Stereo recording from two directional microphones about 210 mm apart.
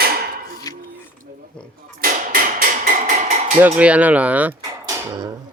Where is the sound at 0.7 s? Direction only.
15° left (ahead or behind).